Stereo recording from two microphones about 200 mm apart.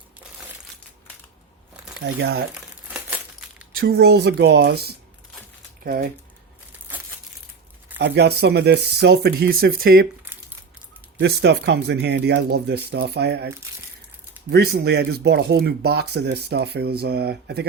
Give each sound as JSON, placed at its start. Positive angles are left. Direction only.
{"t": 2.1, "sound": "speech", "side_deg": -60}
{"t": 2.9, "sound": "crumpling", "side_deg": -5}
{"t": 3.8, "sound": "speech", "side_deg": -50}
{"t": 7.9, "sound": "speech", "side_deg": -60}
{"t": 11.2, "sound": "speech", "side_deg": -60}
{"t": 14.5, "sound": "speech", "side_deg": -55}